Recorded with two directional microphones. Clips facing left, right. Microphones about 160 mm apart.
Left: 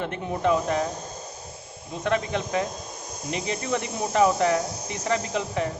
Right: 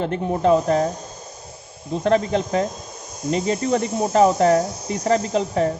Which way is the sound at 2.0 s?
35° right (ahead or behind).